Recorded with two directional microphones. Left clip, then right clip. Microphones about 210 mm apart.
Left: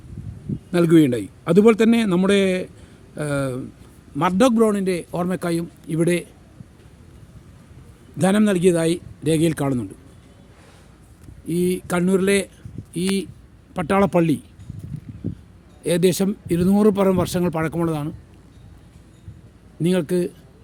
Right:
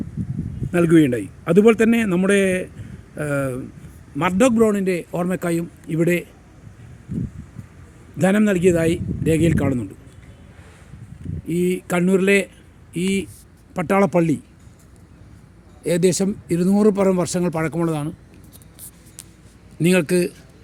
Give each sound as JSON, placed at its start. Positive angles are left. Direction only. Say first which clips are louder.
{"t": 0.7, "sound": "a man's voice", "louder": "even", "side_deg": 10}
{"t": 8.3, "sound": "a man's voice", "louder": "even", "side_deg": 10}
{"t": 8.9, "sound": "speech", "louder": "right 1 dB", "side_deg": 45}
{"t": 9.4, "sound": "speech", "louder": "right 1 dB", "side_deg": 5}
{"t": 11.4, "sound": "speech", "louder": "right 1 dB", "side_deg": 45}
{"t": 11.9, "sound": "speech", "louder": "right 3 dB", "side_deg": 0}
{"t": 12.9, "sound": "speech", "louder": "right 1 dB", "side_deg": 45}
{"t": 13.7, "sound": "speech", "louder": "right 1 dB", "side_deg": 0}
{"t": 15.8, "sound": "speech", "louder": "even", "side_deg": 5}
{"t": 19.8, "sound": "speech", "louder": "right 3 dB", "side_deg": 0}